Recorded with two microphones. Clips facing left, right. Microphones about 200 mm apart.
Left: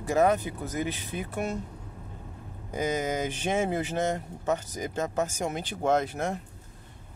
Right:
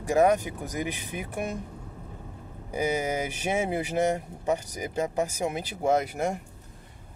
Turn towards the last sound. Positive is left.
turn(degrees=-10)  # may be behind; listen again after turning